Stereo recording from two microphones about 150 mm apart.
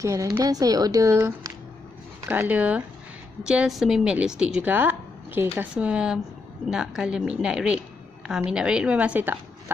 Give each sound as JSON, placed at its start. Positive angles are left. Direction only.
{"t": 0.0, "sound": "a woman's voice", "side_deg": -20}